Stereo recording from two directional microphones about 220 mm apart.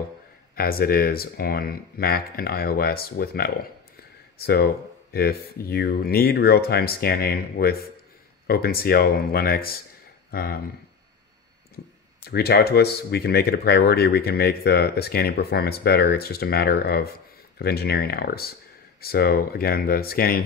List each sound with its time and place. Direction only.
0.6 s speech: 40° left (ahead or behind)
11.7 s speech: 45° left (ahead or behind)